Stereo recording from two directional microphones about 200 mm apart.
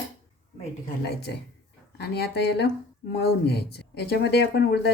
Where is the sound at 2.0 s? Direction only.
55° left (ahead or behind).